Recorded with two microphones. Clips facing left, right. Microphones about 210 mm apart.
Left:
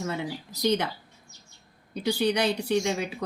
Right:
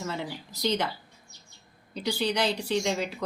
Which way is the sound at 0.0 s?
55° left (ahead or behind).